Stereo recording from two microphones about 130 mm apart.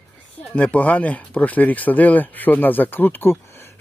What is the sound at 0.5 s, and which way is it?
Speech, 10° left (ahead or behind).